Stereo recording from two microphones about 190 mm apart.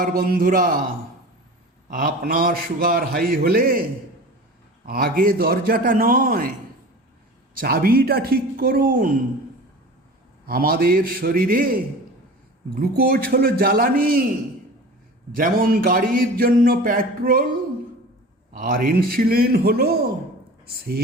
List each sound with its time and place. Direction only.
0.0 s speech: 50° right (ahead or behind)
1.9 s speech: 45° right (ahead or behind)
4.9 s speech: 50° right (ahead or behind)
7.5 s speech: 50° right (ahead or behind)
10.4 s speech: 50° right (ahead or behind)
15.4 s speech: 50° right (ahead or behind)